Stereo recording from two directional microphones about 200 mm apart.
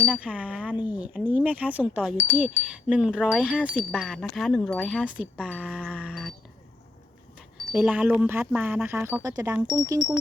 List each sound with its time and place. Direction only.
0.0 s speech: 5° right (ahead or behind)
2.6 s wind chime: 5° right (ahead or behind)
5.5 s music: 5° right (ahead or behind)
7.7 s speech: 5° right (ahead or behind)